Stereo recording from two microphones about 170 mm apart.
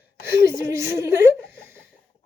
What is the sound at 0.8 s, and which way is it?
Speech, 15° right (ahead or behind).